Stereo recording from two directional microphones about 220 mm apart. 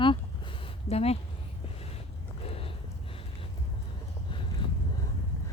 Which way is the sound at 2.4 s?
25° left (ahead or behind).